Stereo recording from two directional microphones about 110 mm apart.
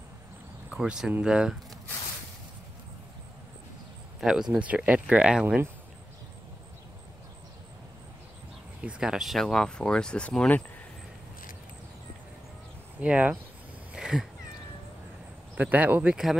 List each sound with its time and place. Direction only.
0.7 s speech: 5° right (ahead or behind)
4.2 s speech: 5° right (ahead or behind)
8.8 s speech: 5° right (ahead or behind); by 10.6 s 10° left (ahead or behind)
13.0 s speech: 10° right (ahead or behind)
13.9 s cat: 5° right (ahead or behind)
15.5 s speech: 15° right (ahead or behind)